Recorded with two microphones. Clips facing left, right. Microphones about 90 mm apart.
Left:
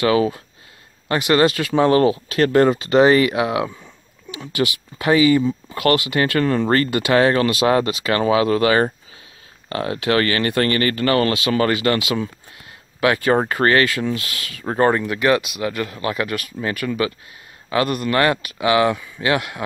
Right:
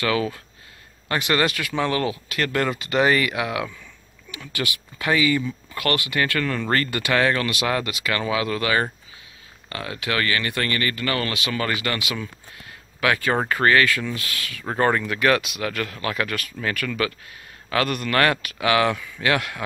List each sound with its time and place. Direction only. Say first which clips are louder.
0.0 s speech: left 6 dB; 25° left (ahead or behind)
14.2 s speech: left 3 dB; 25° left (ahead or behind)
17.8 s speech: left 4 dB; 35° left (ahead or behind)
18.1 s speech: left 1 dB; 20° left (ahead or behind)